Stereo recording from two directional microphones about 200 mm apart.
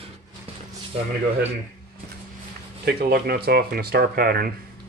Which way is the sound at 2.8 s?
50° right (ahead or behind).